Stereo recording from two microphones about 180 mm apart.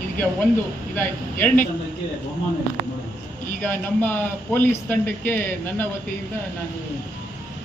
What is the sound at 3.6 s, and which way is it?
A man's voice, 10° left (ahead or behind).